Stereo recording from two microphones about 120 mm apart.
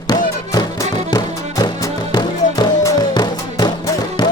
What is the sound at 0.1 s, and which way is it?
Music, 35° left (ahead or behind).